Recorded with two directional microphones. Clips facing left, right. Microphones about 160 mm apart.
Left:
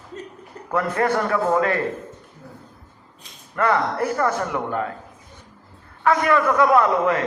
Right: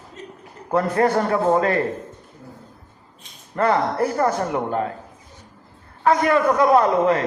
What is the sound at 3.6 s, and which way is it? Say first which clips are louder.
A man's voice: right 2 dB; 35° right (ahead or behind).